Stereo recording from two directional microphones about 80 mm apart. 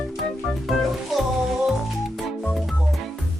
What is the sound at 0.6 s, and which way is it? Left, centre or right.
Music, centre.